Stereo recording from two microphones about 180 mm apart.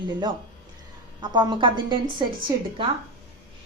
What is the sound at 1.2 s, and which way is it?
A woman's voice, 25° right (ahead or behind).